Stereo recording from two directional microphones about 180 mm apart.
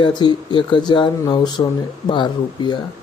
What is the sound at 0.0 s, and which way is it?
Speech, 25° left (ahead or behind).